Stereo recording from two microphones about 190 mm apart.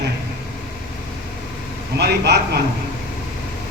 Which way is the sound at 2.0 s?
60° right (ahead or behind).